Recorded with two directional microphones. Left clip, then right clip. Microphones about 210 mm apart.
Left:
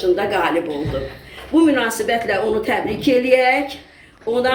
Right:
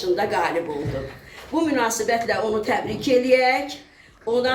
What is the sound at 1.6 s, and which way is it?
A woman's voice, 15° right (ahead or behind).